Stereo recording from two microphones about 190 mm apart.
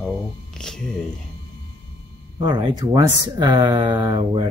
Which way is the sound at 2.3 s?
25° right (ahead or behind).